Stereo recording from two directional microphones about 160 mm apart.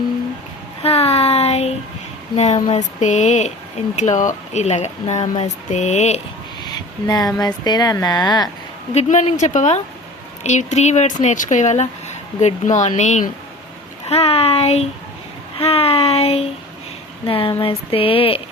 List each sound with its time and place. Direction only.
0.8 s child singing: 40° left (ahead or behind)
2.3 s speech: 45° left (ahead or behind)
6.6 s speech: 25° left (ahead or behind)
8.9 s speech: 45° left (ahead or behind)